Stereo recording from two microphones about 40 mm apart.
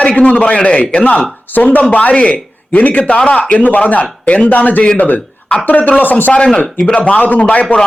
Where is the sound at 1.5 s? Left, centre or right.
Left.